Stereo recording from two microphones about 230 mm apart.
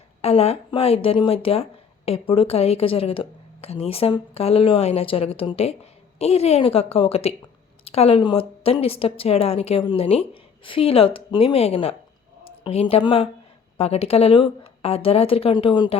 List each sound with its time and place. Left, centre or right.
0.2 s a woman's voice: left